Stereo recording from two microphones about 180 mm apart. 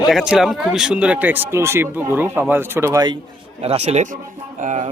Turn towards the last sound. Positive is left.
turn(degrees=-40)  # may be behind; listen again after turning